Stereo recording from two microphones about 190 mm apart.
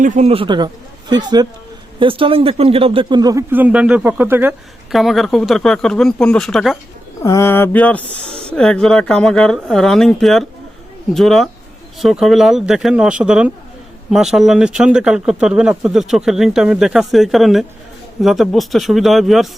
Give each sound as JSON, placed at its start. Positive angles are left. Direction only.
{"t": 0.0, "sound": "speech", "side_deg": -35}
{"t": 3.5, "sound": "speech", "side_deg": -10}
{"t": 7.2, "sound": "mantra", "side_deg": 15}
{"t": 8.4, "sound": "speech", "side_deg": 5}